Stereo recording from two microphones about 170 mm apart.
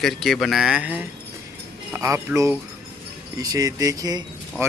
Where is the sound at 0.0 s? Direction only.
Centre (ahead or behind).